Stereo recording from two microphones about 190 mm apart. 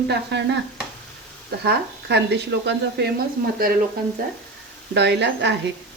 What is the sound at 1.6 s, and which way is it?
A woman's voice, 60° right (ahead or behind).